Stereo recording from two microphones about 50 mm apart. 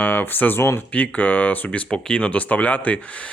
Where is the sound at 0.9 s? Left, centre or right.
Left.